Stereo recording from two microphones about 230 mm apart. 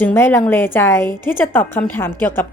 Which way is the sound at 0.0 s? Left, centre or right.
Centre.